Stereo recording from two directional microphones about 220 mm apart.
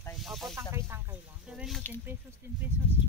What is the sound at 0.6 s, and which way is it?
Speech, 10° right (ahead or behind).